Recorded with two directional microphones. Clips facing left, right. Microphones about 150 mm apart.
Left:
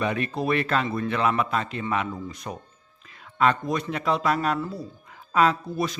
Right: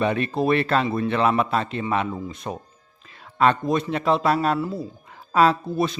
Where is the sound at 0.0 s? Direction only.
30° right (ahead or behind).